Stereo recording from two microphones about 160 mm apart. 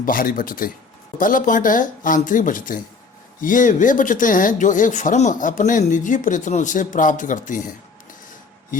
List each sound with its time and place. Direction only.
0.0 s speech: 60° left (ahead or behind)